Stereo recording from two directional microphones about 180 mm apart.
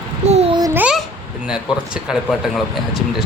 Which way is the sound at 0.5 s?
20° right (ahead or behind).